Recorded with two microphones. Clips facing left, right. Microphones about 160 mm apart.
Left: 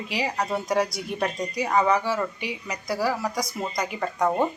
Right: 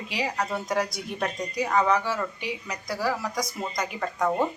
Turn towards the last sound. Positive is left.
turn(degrees=0)  # may be behind; listen again after turning